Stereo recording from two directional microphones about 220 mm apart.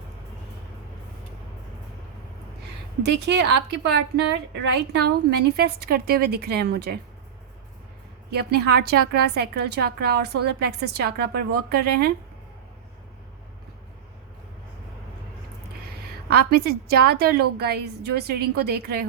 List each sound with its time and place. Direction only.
3.0 s a woman's voice: 50° right (ahead or behind)
8.3 s a woman's voice: 45° right (ahead or behind)
16.3 s a woman's voice: 45° right (ahead or behind)